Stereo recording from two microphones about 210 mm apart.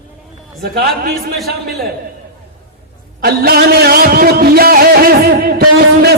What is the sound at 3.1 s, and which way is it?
Music, 45° right (ahead or behind).